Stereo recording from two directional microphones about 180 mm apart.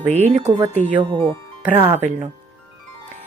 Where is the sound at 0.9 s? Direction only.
25° right (ahead or behind).